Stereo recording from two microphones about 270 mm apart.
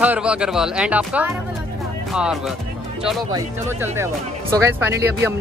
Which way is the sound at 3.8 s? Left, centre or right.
Centre.